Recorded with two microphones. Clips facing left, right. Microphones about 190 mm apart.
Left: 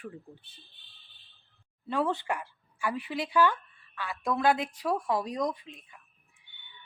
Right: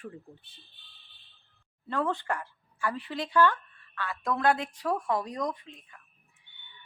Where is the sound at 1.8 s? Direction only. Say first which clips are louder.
Left 1 dB; 10° left (ahead or behind).